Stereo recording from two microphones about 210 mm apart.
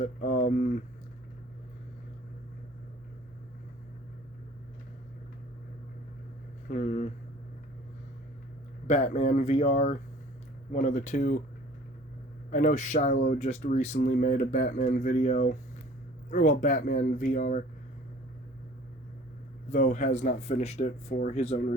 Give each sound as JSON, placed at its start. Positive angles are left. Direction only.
{"t": 0.0, "sound": "speech", "side_deg": 35}
{"t": 6.7, "sound": "speech", "side_deg": 35}
{"t": 8.9, "sound": "speech", "side_deg": 35}
{"t": 12.5, "sound": "speech", "side_deg": 35}
{"t": 19.7, "sound": "speech", "side_deg": 35}